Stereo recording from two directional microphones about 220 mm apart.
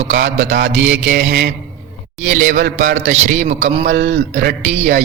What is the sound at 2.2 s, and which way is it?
Speech, 35° right (ahead or behind).